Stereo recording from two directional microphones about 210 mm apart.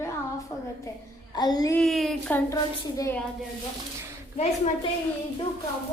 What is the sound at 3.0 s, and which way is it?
Speech, 10° left (ahead or behind).